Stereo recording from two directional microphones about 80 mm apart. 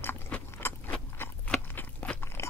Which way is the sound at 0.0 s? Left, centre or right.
Left.